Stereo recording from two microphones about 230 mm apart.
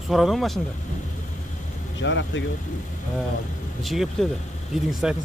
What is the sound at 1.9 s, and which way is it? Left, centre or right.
Speech, left.